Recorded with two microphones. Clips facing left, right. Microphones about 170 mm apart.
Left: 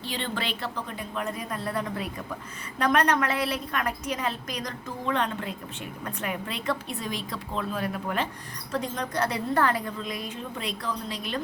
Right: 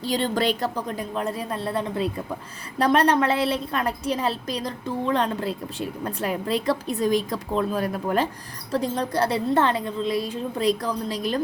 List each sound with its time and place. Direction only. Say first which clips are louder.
0.0 s a woman's voice: right 9 dB; 40° right (ahead or behind)